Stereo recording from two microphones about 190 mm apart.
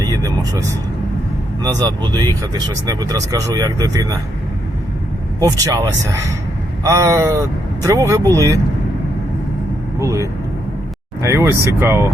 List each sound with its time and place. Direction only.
0.0 s speech: 20° right (ahead or behind)
5.4 s speech: 15° right (ahead or behind)
10.0 s speech: 15° right (ahead or behind)